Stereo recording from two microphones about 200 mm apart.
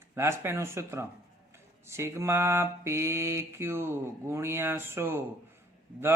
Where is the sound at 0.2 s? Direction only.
15° right (ahead or behind).